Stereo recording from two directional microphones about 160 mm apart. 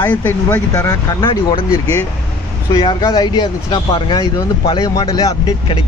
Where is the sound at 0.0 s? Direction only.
10° left (ahead or behind); by 1.7 s 30° left (ahead or behind).